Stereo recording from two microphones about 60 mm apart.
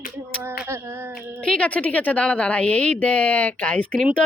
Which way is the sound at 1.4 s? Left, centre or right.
Centre.